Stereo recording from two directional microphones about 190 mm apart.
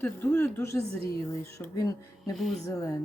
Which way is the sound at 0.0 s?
10° left (ahead or behind).